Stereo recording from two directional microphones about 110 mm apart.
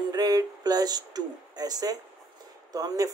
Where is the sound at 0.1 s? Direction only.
35° right (ahead or behind).